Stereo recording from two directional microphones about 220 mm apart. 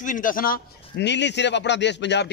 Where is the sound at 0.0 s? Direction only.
35° left (ahead or behind).